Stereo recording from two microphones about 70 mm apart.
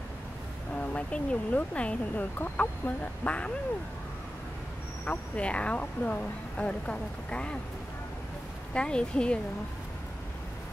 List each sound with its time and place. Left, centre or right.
0.7 s speech: centre
5.0 s speech: centre
8.7 s speech: centre